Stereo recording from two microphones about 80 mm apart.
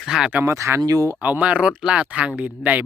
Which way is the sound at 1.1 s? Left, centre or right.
Right.